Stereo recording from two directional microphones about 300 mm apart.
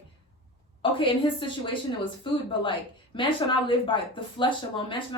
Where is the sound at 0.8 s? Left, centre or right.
Centre.